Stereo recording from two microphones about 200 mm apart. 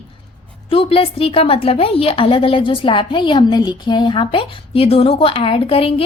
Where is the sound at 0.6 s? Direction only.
25° left (ahead or behind).